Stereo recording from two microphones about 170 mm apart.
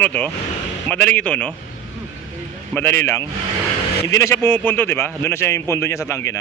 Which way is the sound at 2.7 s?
10° left (ahead or behind).